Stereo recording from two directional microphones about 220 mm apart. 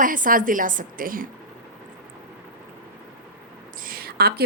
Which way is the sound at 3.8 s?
40° right (ahead or behind).